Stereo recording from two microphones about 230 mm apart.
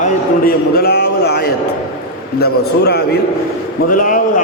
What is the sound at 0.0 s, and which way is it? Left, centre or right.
A man's voice, left.